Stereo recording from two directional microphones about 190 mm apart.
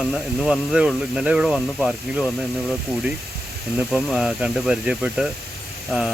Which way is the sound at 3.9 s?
Centre (ahead or behind).